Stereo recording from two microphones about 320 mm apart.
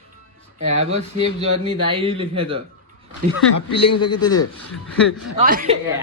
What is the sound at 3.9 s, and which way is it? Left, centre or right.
Speech, left.